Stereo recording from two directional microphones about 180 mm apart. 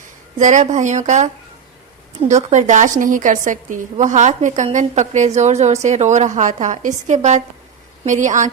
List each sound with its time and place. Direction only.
0.3 s a woman's voice: 45° right (ahead or behind)